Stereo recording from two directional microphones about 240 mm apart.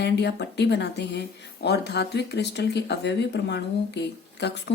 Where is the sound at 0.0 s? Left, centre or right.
Left.